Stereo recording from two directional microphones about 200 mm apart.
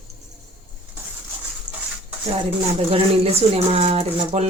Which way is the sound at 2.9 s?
30° right (ahead or behind).